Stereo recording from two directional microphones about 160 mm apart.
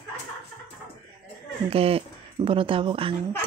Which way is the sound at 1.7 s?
35° right (ahead or behind).